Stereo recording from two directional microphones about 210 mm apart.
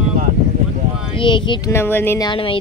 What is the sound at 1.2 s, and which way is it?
Speech, 25° left (ahead or behind).